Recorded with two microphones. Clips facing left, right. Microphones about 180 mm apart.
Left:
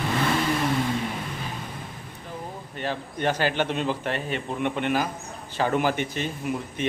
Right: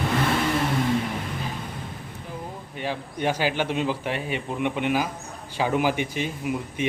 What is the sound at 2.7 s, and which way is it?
A man's voice, 10° right (ahead or behind).